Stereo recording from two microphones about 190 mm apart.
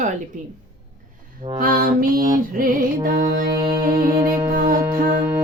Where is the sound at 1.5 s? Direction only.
45° right (ahead or behind).